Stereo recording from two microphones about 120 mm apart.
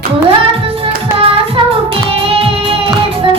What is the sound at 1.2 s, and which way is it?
Music, 50° right (ahead or behind).